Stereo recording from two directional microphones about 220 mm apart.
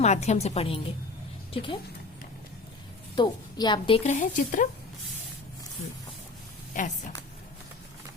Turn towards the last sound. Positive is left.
turn(degrees=35)  # may be behind; listen again after turning